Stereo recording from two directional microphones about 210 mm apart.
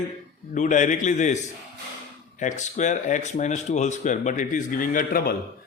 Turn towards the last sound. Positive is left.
turn(degrees=45)  # may be behind; listen again after turning